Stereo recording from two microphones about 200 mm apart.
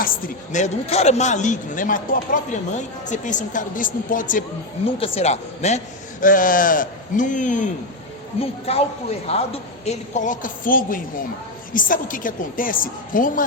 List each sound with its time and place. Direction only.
0.0 s speech: 40° left (ahead or behind)
4.9 s a woman's voice: 30° left (ahead or behind)